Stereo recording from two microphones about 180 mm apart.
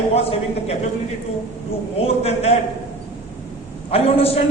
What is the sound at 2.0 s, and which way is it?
Speech, 35° left (ahead or behind).